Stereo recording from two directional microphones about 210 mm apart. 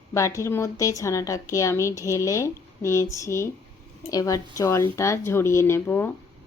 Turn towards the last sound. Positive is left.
turn(degrees=10)  # may be behind; listen again after turning